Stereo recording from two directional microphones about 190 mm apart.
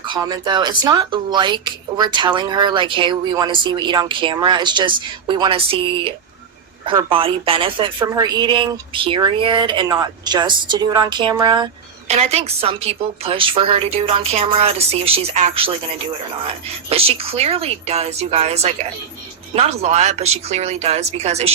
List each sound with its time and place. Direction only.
0.0 s speech: 20° right (ahead or behind)
12.0 s a woman's voice: 35° right (ahead or behind)
16.9 s a woman's voice: 30° right (ahead or behind)